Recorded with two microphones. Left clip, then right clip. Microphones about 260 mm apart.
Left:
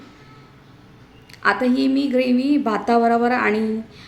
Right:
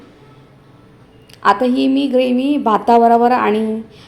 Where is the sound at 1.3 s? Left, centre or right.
Centre.